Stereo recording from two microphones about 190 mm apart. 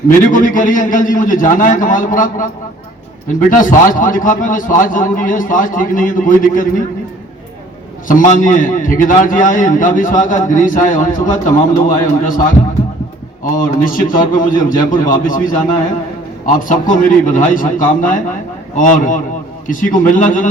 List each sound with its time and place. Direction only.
0.3 s a man's voice: 45° left (ahead or behind)
3.5 s a man's voice: 45° left (ahead or behind)
8.0 s a man's voice: 45° left (ahead or behind)
16.6 s a man's voice: 45° left (ahead or behind)